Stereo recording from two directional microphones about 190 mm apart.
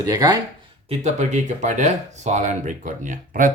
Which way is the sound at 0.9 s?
35° right (ahead or behind).